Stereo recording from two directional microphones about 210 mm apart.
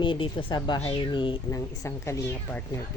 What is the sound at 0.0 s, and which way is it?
Speech, 25° left (ahead or behind).